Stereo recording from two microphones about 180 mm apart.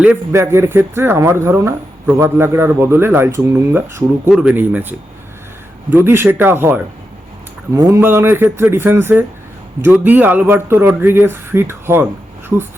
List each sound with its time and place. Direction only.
0.0 s speech: 10° right (ahead or behind)